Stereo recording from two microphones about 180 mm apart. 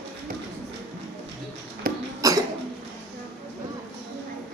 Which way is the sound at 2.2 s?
20° right (ahead or behind).